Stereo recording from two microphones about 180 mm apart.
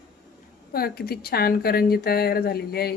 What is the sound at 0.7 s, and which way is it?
Speech, 55° left (ahead or behind).